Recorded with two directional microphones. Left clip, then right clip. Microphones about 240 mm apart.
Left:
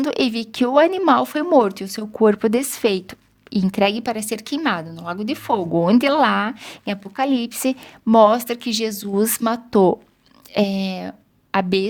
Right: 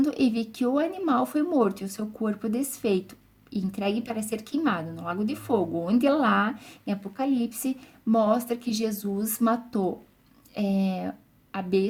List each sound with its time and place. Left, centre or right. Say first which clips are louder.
0.0 s a woman's voice: left 5 dB; left